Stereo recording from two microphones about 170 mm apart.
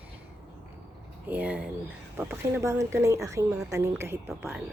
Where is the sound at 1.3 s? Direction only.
10° right (ahead or behind).